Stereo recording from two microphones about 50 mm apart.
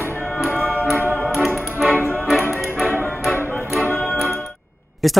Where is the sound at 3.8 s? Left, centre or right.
Left.